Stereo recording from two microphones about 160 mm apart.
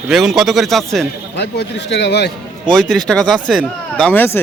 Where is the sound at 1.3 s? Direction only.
90° left.